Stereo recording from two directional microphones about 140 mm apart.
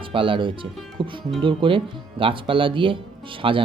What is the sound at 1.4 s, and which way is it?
Speech, 40° right (ahead or behind).